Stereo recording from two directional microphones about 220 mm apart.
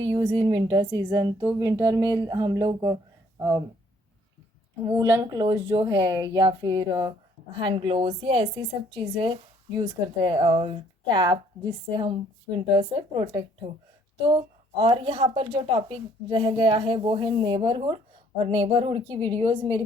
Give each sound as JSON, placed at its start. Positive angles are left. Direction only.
{"t": 0.0, "sound": "a woman's voice", "side_deg": -25}
{"t": 4.9, "sound": "a woman's voice", "side_deg": -15}
{"t": 12.7, "sound": "a woman's voice", "side_deg": -25}